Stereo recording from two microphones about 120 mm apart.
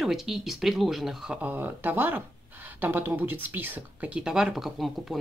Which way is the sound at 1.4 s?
15° right (ahead or behind).